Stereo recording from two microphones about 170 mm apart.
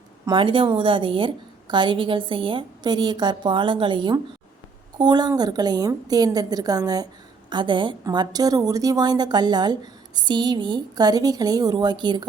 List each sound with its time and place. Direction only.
0.3 s a woman's voice: 30° right (ahead or behind)